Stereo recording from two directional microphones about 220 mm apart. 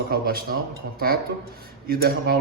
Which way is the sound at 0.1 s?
45° right (ahead or behind).